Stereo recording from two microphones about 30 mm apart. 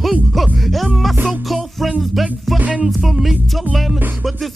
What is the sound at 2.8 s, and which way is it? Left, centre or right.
Music, centre.